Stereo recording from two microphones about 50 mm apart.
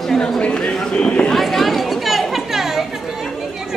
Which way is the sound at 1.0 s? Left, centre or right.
Centre.